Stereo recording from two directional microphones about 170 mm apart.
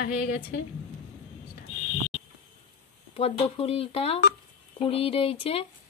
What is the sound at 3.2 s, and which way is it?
Speech, 35° left (ahead or behind).